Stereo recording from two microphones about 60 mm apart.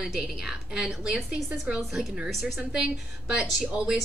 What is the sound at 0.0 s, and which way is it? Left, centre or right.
A woman's voice, centre.